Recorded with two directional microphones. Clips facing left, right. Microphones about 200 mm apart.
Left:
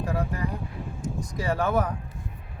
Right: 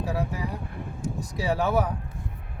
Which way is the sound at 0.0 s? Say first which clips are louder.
Left 1 dB; 5° right (ahead or behind).